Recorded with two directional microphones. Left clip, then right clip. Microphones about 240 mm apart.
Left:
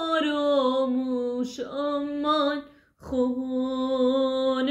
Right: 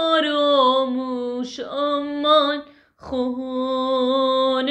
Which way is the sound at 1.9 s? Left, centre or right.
Centre.